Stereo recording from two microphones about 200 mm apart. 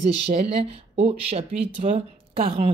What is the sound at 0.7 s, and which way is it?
Speech, 30° right (ahead or behind).